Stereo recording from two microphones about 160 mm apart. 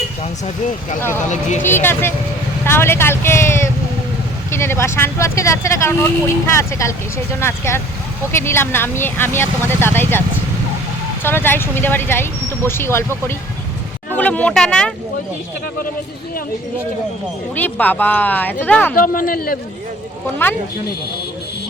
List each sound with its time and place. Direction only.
0.2 s speech: 40° left (ahead or behind)
1.7 s speech: 15° left (ahead or behind)
14.2 s speech: 10° left (ahead or behind)
17.5 s speech: 10° left (ahead or behind)
18.9 s speech: 60° left (ahead or behind)
20.4 s speech: 15° left (ahead or behind)